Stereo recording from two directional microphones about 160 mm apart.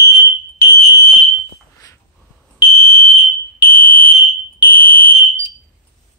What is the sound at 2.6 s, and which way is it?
Fire alarm, 35° left (ahead or behind).